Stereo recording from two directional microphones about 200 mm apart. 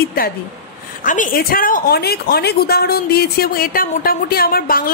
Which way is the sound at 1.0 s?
40° left (ahead or behind).